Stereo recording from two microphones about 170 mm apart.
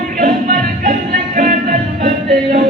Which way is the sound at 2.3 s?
65° right (ahead or behind).